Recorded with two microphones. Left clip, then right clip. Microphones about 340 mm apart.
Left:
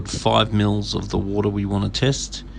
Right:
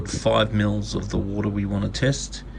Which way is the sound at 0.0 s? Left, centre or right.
Centre.